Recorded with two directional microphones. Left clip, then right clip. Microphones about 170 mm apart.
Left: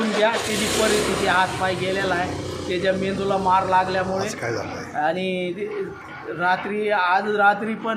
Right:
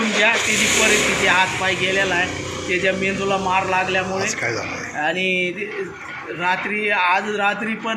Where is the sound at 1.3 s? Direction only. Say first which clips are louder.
Right 3 dB; 10° left (ahead or behind).